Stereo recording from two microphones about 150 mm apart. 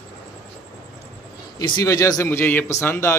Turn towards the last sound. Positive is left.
turn(degrees=15)  # may be behind; listen again after turning